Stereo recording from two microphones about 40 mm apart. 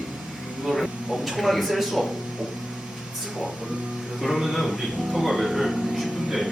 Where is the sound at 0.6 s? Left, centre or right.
Centre.